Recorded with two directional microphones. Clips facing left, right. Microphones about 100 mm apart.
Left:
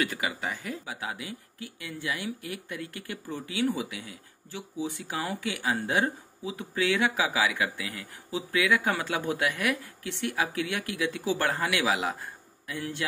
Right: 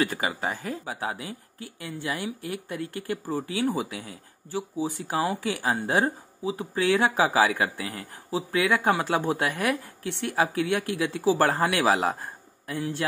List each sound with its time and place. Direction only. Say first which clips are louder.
0.0 s speech: right 4 dB; 35° right (ahead or behind)